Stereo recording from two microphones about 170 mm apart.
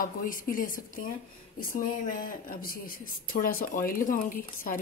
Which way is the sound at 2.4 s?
60° left (ahead or behind).